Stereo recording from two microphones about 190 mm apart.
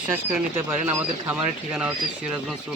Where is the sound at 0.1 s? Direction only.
10° right (ahead or behind).